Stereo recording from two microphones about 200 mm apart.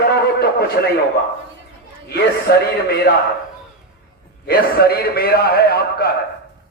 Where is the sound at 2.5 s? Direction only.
50° left (ahead or behind).